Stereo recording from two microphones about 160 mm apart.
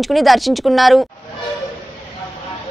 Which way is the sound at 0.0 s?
Centre (ahead or behind).